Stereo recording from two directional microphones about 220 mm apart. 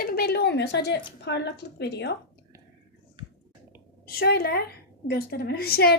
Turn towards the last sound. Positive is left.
turn(degrees=45)  # may be behind; listen again after turning